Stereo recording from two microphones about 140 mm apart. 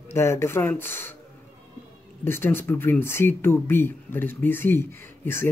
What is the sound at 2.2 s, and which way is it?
Speech, 15° left (ahead or behind).